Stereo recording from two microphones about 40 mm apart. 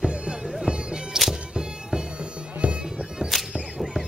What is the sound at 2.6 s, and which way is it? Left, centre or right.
Bagpipes, right.